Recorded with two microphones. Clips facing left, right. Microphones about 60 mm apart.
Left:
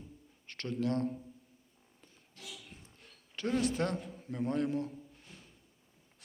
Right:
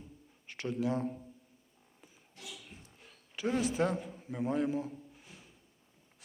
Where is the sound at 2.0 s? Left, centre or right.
Centre.